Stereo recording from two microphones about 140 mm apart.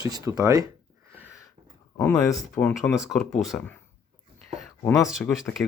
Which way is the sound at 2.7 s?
5° right (ahead or behind).